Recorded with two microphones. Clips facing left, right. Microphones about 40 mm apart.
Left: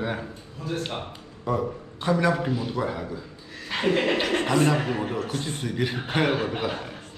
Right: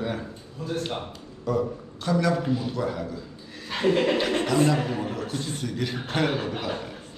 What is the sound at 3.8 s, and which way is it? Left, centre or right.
Speech, left.